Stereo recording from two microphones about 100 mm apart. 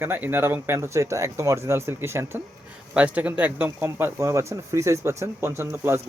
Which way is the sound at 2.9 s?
15° right (ahead or behind).